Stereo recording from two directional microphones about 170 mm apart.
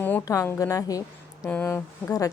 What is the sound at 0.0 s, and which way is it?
A woman's voice, 15° left (ahead or behind).